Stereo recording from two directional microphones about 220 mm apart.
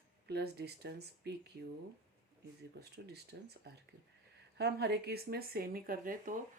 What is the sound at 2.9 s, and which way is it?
Speech, 50° right (ahead or behind).